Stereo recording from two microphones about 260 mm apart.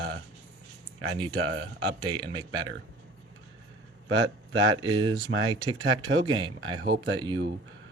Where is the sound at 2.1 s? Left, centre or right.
Centre.